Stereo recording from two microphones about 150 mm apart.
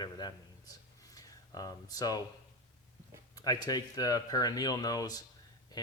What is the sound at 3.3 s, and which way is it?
Speech, 25° left (ahead or behind).